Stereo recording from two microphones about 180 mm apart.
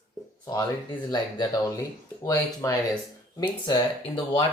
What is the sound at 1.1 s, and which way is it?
Speech, 20° left (ahead or behind).